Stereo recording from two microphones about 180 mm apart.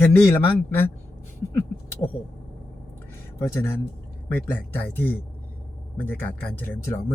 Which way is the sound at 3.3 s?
15° left (ahead or behind).